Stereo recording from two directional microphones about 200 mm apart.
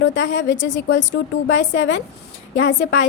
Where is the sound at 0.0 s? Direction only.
60° left (ahead or behind).